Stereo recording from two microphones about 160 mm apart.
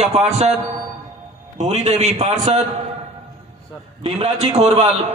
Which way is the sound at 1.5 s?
50° right (ahead or behind).